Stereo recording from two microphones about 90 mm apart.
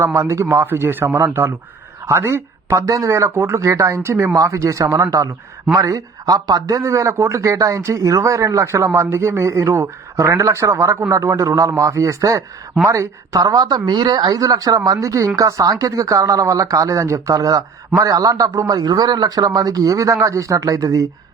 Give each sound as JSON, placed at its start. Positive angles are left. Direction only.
{"t": 0.0, "sound": "speech", "side_deg": -35}